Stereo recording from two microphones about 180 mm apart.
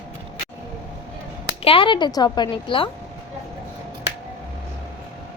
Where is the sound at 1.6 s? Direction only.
30° left (ahead or behind).